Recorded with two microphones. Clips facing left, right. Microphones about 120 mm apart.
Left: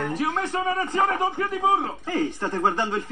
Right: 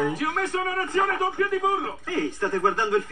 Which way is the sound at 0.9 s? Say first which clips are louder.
Left 1 dB; 25° left (ahead or behind).